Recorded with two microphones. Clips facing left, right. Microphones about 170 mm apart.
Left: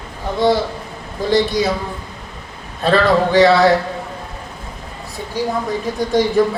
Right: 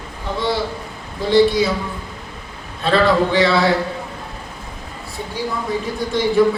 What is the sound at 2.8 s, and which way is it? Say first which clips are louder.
Speech: left 1 dB; 45° left (ahead or behind).